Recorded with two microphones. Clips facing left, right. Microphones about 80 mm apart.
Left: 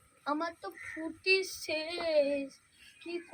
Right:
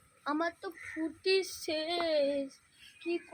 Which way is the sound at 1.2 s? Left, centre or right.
Right.